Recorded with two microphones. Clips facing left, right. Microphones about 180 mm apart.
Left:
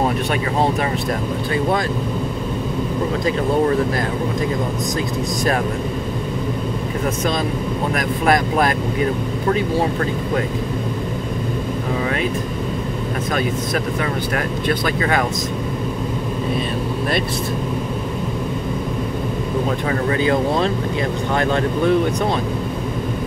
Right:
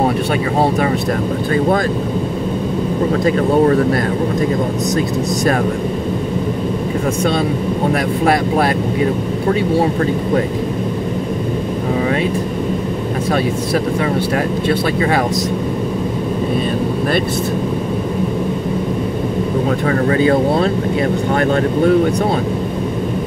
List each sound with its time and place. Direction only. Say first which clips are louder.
7.9 s speech: right 1 dB; 30° right (ahead or behind)
14.7 s speech: right 3 dB; 30° right (ahead or behind)
20.1 s speech: right 4 dB; 40° right (ahead or behind)